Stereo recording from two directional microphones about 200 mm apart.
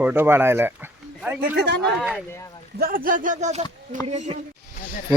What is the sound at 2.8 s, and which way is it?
Speech, 45° right (ahead or behind).